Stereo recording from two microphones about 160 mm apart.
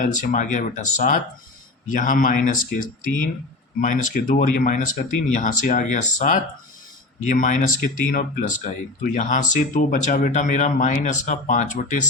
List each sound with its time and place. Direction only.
0.0 s speech: 50° left (ahead or behind)